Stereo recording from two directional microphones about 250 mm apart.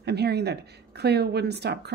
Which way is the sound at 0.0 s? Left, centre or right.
Right.